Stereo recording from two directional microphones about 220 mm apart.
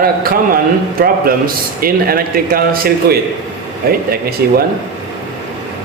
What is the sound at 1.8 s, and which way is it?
Speech, 40° right (ahead or behind).